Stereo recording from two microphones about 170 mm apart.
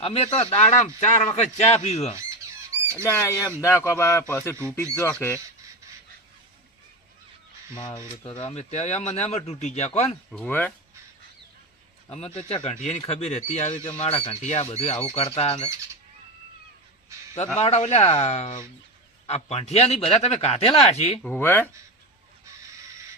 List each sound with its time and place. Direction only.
0.0 s speech: 35° left (ahead or behind)
2.1 s squawk: 15° right (ahead or behind)
3.0 s speech: 15° left (ahead or behind)
7.8 s speech: 25° left (ahead or behind)
10.3 s speech: 5° left (ahead or behind)
12.1 s speech: 35° left (ahead or behind)
17.6 s speech: 40° left (ahead or behind)
21.2 s speech: 10° left (ahead or behind)